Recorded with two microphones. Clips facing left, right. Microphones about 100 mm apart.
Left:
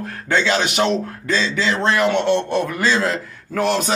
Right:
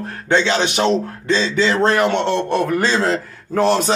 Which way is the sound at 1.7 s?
40° right (ahead or behind).